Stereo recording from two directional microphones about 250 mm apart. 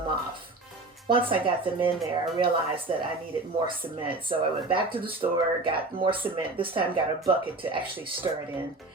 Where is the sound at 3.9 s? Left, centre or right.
Centre.